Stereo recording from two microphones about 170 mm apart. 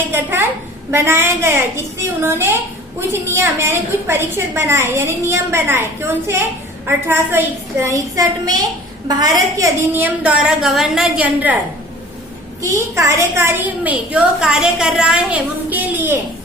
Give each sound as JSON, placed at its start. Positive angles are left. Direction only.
{"t": 0.1, "sound": "a woman's voice", "side_deg": -15}
{"t": 12.7, "sound": "a woman's voice", "side_deg": -15}